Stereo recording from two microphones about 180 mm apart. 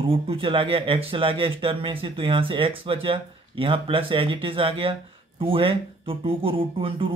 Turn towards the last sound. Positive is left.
turn(degrees=-30)  # may be behind; listen again after turning